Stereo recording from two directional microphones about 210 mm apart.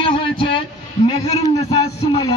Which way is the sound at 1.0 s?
20° left (ahead or behind).